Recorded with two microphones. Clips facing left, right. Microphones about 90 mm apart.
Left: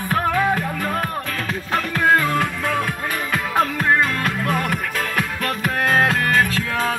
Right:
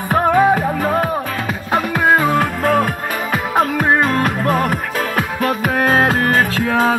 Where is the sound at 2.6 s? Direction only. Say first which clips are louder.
Right 7 dB; 40° right (ahead or behind).